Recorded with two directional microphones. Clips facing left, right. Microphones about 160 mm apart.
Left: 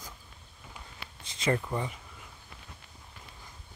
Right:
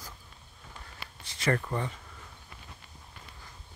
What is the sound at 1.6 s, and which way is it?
Speech, 10° left (ahead or behind).